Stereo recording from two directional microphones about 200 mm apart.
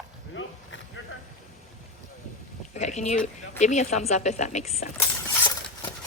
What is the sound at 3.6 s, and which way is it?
A woman's voice, 35° left (ahead or behind).